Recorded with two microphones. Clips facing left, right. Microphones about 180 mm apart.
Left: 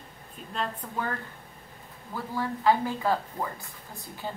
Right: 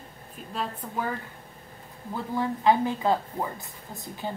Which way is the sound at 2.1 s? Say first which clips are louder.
Right 3 dB; 20° right (ahead or behind).